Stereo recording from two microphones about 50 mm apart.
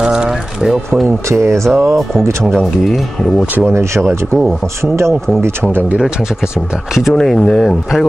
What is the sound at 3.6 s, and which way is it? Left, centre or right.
Speech, right.